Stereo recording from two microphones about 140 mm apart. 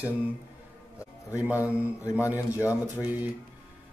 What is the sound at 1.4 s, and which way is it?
Speech, 10° right (ahead or behind).